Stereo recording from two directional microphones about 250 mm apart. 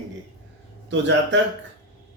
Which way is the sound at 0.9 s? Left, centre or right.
Right.